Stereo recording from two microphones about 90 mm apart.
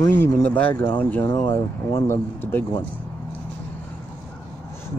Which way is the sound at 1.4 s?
30° left (ahead or behind).